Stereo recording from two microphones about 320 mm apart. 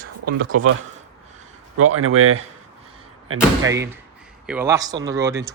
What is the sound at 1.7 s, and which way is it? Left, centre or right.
Speech, right.